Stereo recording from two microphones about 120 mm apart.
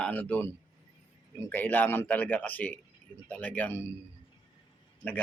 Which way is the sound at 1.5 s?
15° left (ahead or behind).